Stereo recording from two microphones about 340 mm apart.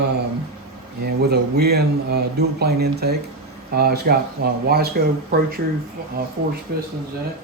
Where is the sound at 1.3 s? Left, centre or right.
Right.